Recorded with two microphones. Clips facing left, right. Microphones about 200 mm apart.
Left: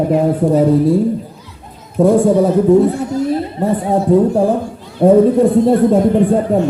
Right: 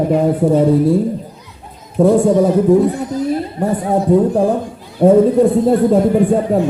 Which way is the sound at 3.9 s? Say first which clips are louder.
Left 1 dB; centre (ahead or behind).